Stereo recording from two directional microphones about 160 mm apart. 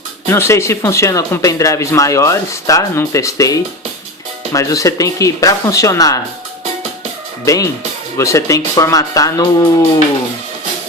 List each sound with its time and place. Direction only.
0.3 s speech: 15° left (ahead or behind)
7.4 s speech: 20° left (ahead or behind)